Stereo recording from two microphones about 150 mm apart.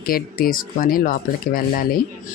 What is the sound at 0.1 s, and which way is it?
Speech, 75° left (ahead or behind).